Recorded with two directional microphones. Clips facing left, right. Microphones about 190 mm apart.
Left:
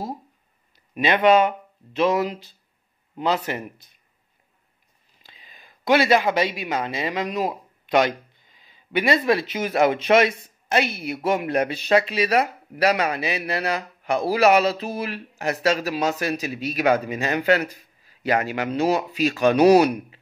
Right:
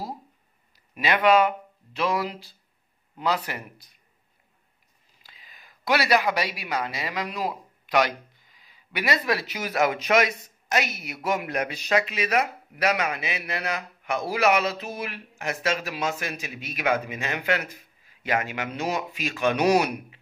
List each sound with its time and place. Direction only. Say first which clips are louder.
0.7 s speech: left 4 dB; 25° left (ahead or behind)
5.2 s speech: left 3 dB; 25° left (ahead or behind)